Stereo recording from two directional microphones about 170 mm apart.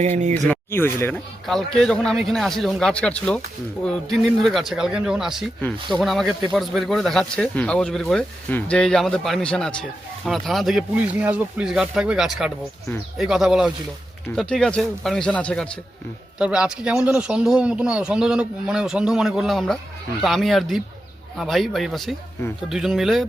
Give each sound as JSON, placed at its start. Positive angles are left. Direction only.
{"t": 0.0, "sound": "speech", "side_deg": -45}
{"t": 0.4, "sound": "speech", "side_deg": 10}
{"t": 1.1, "sound": "speech", "side_deg": 0}
{"t": 16.4, "sound": "speech", "side_deg": -5}